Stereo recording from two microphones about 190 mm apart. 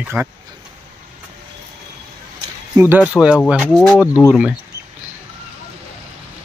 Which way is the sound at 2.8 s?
10° right (ahead or behind).